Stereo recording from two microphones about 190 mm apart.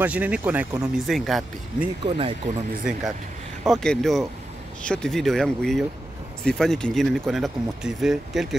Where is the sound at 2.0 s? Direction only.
30° right (ahead or behind).